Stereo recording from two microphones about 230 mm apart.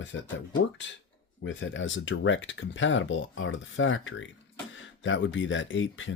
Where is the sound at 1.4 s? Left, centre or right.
Left.